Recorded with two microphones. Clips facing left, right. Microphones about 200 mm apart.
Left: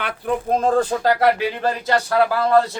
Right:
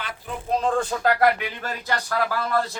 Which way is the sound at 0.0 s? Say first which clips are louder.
Left 10 dB; 55° left (ahead or behind).